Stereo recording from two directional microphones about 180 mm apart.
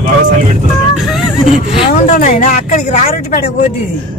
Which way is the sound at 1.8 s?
45° left (ahead or behind).